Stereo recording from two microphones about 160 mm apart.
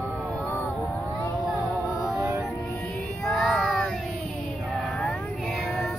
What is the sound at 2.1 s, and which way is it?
Music, 15° right (ahead or behind).